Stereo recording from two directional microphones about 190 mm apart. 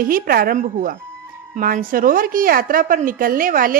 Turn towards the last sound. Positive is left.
turn(degrees=-45)  # may be behind; listen again after turning